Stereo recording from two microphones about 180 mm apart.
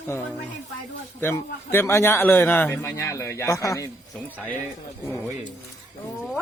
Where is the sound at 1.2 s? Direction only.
15° left (ahead or behind).